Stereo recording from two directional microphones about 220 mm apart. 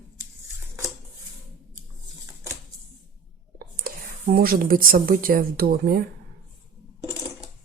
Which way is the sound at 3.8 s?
45° right (ahead or behind).